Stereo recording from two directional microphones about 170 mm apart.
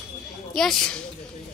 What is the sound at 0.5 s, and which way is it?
Speech, 5° left (ahead or behind).